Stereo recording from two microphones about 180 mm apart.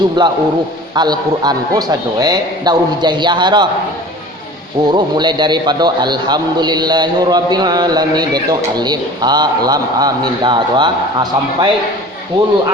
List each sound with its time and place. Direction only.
0.2 s a man's voice: 25° right (ahead or behind)
4.8 s a man's voice: 25° right (ahead or behind)